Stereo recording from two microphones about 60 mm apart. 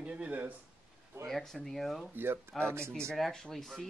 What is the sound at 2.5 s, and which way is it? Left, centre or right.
Speech, right.